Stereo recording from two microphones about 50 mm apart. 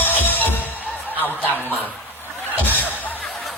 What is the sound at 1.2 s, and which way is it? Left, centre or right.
Snicker, left.